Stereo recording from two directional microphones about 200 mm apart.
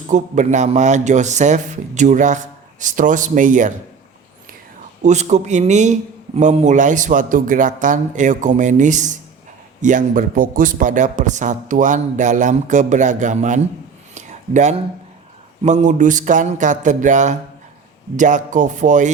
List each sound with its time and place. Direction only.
0.1 s a man's voice: 35° right (ahead or behind)
5.0 s a man's voice: 35° right (ahead or behind)
14.2 s a sound: 35° right (ahead or behind)
15.6 s a man's voice: 35° right (ahead or behind)